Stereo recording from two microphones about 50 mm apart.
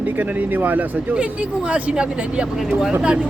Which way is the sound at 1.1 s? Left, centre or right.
Right.